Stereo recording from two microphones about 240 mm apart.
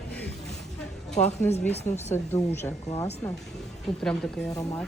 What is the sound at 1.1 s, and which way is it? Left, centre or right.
Speech, left.